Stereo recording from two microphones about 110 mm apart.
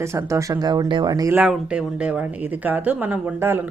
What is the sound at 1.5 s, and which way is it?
Speech, 10° right (ahead or behind).